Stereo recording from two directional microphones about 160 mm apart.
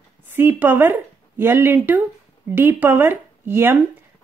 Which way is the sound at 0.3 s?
15° right (ahead or behind).